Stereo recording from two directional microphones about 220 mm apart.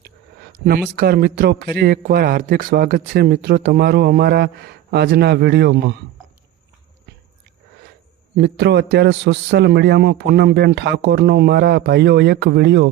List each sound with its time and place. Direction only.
0.9 s a man's voice: 45° right (ahead or behind)
8.4 s a man's voice: 50° right (ahead or behind)